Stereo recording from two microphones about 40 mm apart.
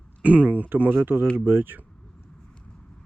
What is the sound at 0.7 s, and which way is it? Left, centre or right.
Speech, right.